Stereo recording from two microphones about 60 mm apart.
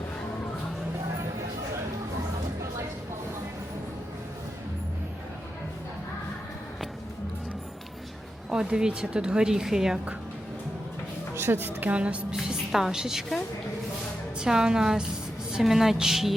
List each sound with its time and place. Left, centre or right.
8.4 s a woman's voice: centre
11.3 s a woman's voice: right; by 16.3 s centre